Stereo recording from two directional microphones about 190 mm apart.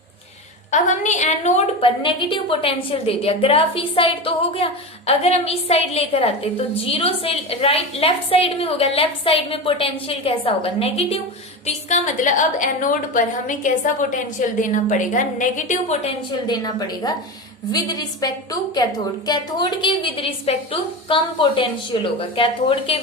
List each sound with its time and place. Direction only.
0.7 s a woman's voice: 40° left (ahead or behind)
16.5 s a woman's voice: 20° left (ahead or behind)